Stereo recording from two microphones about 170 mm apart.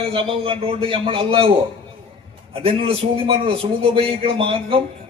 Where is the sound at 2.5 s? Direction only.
35° right (ahead or behind).